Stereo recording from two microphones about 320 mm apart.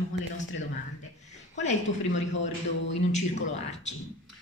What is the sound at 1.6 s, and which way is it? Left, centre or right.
Speech, left.